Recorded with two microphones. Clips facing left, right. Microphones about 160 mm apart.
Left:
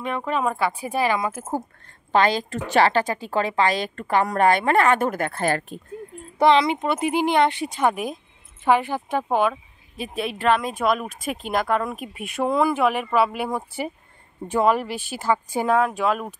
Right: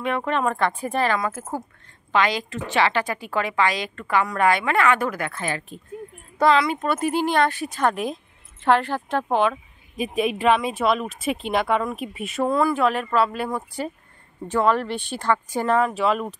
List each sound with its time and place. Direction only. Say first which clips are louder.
0.2 s speech: right 1 dB; 5° left (ahead or behind); by 1.6 s 20° left (ahead or behind)
2.1 s a woman's voice: left 2 dB; 35° left (ahead or behind)
3.1 s speech: left 2 dB; 25° left (ahead or behind)
3.7 s a woman's voice: left 3 dB; 45° left (ahead or behind)
4.1 s a woman's voice: left 1 dB; 35° left (ahead or behind)
4.4 s a woman's voice: left 3 dB; 50° left (ahead or behind)
6.3 s speech: left 2 dB; 20° left (ahead or behind)
10.0 s speech: right 2 dB; 10° right (ahead or behind)
12.4 s speech: even; 10° left (ahead or behind)